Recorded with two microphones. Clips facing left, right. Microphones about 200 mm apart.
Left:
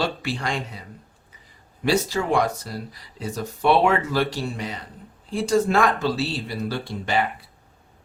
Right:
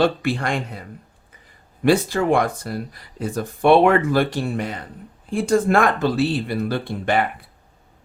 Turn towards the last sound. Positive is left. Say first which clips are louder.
# right 3 dB
turn(degrees=-55)  # may be behind; listen again after turning